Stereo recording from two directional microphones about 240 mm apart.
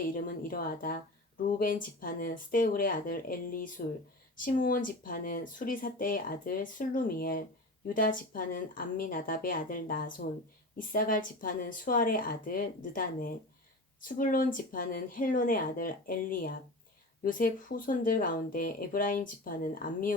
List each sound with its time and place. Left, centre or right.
0.1 s speech: left